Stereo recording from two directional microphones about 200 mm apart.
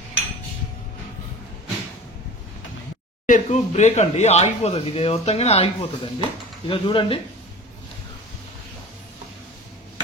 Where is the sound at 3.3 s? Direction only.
35° left (ahead or behind).